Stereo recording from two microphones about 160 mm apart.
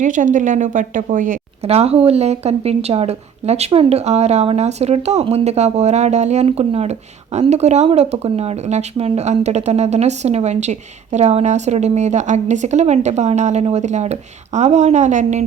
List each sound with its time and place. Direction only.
0.0 s speech: 55° right (ahead or behind)
1.6 s speech: 40° right (ahead or behind)